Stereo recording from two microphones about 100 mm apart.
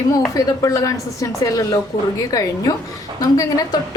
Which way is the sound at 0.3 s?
35° left (ahead or behind).